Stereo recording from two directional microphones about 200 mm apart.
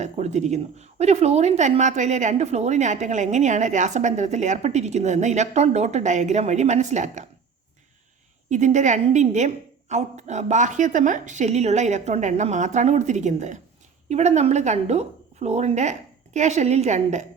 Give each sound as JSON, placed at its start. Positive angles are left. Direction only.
{"t": 0.0, "sound": "a woman's voice", "side_deg": -35}
{"t": 8.4, "sound": "a woman's voice", "side_deg": -35}